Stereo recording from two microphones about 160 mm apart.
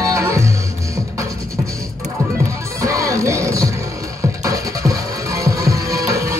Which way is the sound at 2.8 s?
20° right (ahead or behind).